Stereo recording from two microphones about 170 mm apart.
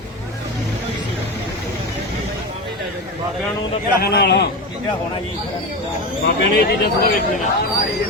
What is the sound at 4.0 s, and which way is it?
Speech, 70° left (ahead or behind).